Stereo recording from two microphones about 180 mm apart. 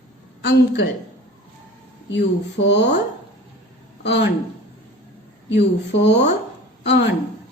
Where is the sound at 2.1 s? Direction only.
75° left (ahead or behind).